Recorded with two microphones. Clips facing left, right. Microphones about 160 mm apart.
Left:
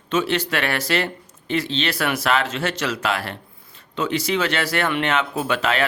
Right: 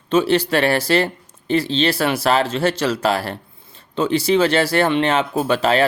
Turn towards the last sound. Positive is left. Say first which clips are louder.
# right 5 dB
turn(degrees=-35)  # may be behind; listen again after turning